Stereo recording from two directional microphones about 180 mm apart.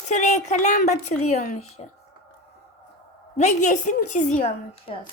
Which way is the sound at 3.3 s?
40° left (ahead or behind).